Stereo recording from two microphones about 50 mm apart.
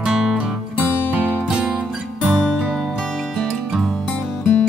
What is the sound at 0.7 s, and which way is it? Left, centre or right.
Music, left.